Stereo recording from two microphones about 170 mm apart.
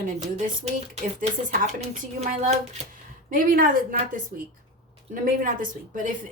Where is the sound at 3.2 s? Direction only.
55° right (ahead or behind).